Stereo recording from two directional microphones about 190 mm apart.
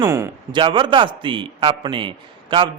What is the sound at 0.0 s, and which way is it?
Speech, 15° right (ahead or behind).